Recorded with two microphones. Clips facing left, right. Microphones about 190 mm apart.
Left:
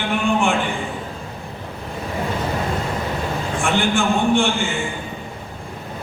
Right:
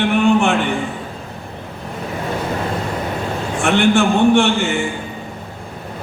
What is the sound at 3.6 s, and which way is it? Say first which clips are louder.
Speech: right 6 dB; 65° right (ahead or behind).